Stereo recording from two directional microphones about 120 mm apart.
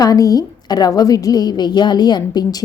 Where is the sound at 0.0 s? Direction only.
30° left (ahead or behind).